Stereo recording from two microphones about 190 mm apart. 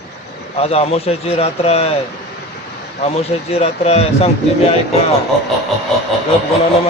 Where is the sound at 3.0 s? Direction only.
30° left (ahead or behind).